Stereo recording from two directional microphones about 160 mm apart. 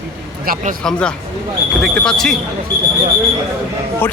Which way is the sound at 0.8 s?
5° left (ahead or behind).